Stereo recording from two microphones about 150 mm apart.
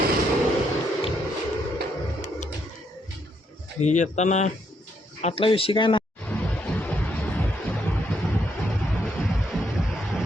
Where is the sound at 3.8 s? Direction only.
50° left (ahead or behind).